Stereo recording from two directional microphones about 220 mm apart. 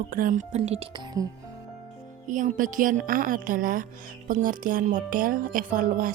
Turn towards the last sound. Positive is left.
turn(degrees=-40)  # may be behind; listen again after turning